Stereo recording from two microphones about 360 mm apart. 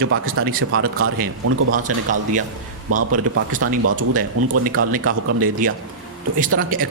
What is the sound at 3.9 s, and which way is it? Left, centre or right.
Speech, right.